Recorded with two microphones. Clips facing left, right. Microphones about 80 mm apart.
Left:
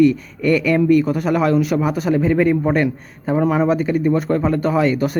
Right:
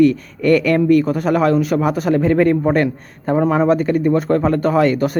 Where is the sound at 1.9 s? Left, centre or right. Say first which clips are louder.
Right 2 dB; right.